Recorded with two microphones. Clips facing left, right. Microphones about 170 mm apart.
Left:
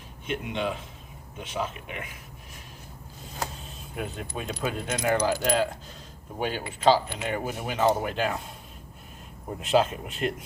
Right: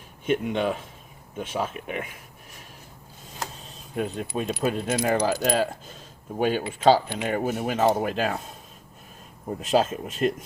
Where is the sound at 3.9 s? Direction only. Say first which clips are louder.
Right 6 dB; 35° right (ahead or behind).